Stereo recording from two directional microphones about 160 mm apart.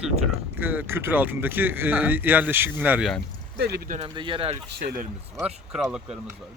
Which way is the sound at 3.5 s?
90° right.